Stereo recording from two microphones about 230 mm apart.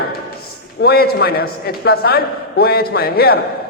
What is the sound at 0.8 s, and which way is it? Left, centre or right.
A man's voice, left.